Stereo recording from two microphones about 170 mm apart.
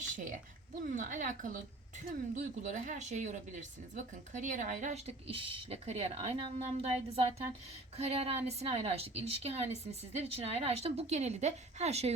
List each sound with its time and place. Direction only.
0.9 s a woman's voice: 50° right (ahead or behind)